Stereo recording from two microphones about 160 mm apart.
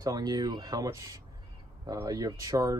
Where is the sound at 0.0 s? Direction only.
25° right (ahead or behind).